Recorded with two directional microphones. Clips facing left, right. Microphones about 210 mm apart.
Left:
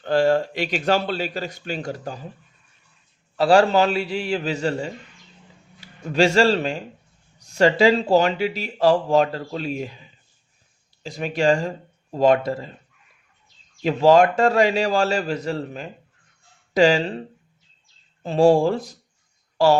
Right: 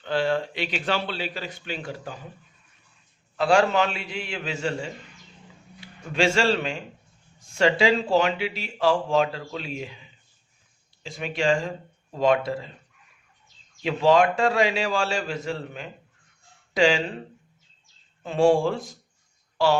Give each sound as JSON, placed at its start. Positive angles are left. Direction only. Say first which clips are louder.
{"t": 0.0, "sound": "a man's voice", "louder": "left 6 dB", "side_deg": 45}
{"t": 3.3, "sound": "speech", "louder": "left 4 dB", "side_deg": 35}
{"t": 6.1, "sound": "speech", "louder": "left 5 dB", "side_deg": 40}
{"t": 13.8, "sound": "speech", "louder": "left 4 dB", "side_deg": 40}
{"t": 18.2, "sound": "a woman's voice", "louder": "left 4 dB", "side_deg": 35}